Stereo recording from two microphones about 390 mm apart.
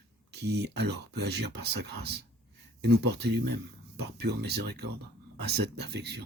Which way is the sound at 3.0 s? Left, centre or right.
Right.